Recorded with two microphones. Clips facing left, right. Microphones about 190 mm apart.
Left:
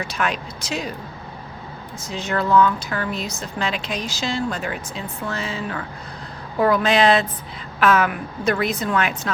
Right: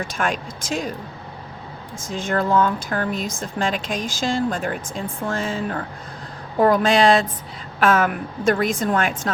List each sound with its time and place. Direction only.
0.0 s speech: 45° right (ahead or behind)
2.0 s speech: 50° right (ahead or behind)